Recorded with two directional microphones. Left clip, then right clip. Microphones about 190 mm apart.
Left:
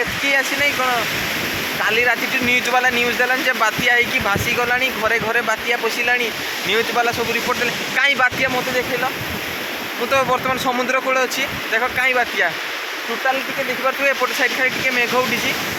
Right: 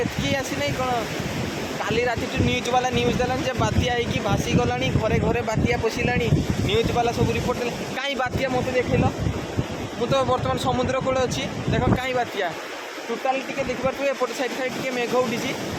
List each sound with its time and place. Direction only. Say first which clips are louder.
0.3 s speech: left 10 dB; 10° left (ahead or behind)
1.8 s speech: left 7 dB; 10° left (ahead or behind)
10.1 s speech: left 5 dB; 10° left (ahead or behind)
14.0 s speech: left 7 dB; 5° left (ahead or behind)